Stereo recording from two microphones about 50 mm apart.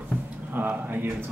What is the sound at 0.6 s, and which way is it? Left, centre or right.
Speech, right.